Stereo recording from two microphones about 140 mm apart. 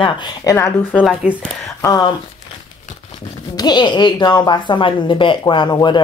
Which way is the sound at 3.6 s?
30° left (ahead or behind).